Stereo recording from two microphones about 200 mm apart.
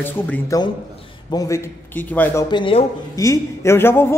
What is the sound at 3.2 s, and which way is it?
Speech, 15° left (ahead or behind).